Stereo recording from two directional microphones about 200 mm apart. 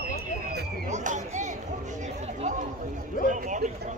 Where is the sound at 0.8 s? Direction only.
35° right (ahead or behind).